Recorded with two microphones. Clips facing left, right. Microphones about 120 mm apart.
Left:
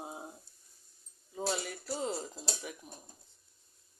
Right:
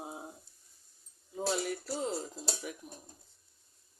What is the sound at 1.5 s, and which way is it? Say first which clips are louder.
Speech: right 5 dB; centre (ahead or behind).